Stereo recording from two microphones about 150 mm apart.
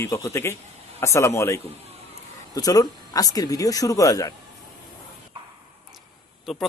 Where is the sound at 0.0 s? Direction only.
20° left (ahead or behind).